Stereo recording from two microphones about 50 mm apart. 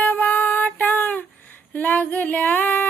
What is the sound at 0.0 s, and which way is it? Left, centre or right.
Female singing, left.